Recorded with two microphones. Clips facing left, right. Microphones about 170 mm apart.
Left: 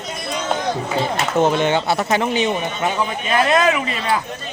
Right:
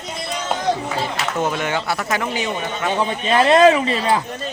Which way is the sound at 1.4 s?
25° left (ahead or behind).